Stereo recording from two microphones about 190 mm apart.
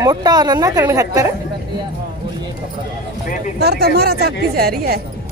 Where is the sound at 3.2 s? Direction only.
45° left (ahead or behind).